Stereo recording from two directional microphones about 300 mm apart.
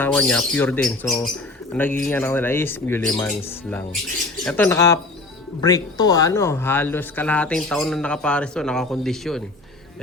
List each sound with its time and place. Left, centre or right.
0.0 s speech: centre